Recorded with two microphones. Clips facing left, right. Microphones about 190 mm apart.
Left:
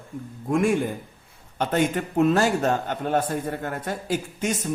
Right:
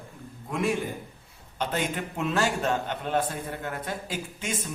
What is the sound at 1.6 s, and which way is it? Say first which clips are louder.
A man's voice: left 6 dB; 45° left (ahead or behind).